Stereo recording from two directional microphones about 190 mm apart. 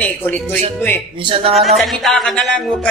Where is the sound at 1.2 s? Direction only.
30° right (ahead or behind).